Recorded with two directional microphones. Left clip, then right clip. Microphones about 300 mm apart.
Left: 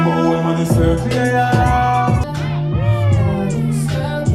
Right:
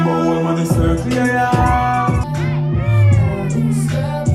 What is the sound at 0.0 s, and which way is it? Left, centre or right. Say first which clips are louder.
Music: even; left.